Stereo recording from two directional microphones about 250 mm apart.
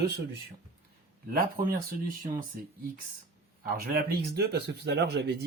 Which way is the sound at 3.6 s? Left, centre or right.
Right.